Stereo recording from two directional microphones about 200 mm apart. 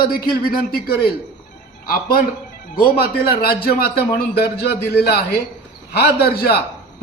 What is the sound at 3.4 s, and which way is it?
Speech, 50° left (ahead or behind).